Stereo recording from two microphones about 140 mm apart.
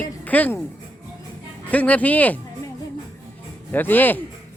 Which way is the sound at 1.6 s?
10° left (ahead or behind).